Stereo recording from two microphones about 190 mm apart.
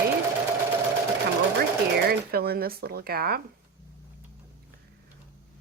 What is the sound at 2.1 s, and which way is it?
Speech, 55° right (ahead or behind).